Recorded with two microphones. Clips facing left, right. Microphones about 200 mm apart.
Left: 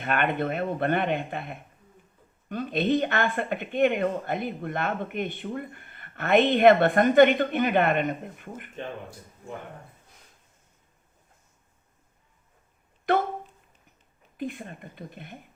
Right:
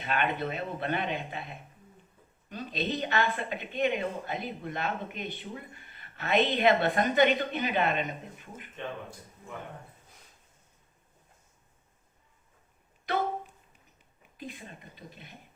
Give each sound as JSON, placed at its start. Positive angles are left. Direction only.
{"t": 0.0, "sound": "speech", "side_deg": 55}
{"t": 14.3, "sound": "speech", "side_deg": 55}